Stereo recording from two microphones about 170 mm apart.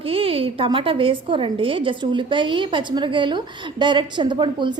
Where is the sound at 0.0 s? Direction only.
35° right (ahead or behind).